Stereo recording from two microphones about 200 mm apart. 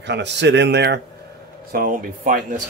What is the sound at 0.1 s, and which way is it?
Speech, 60° right (ahead or behind).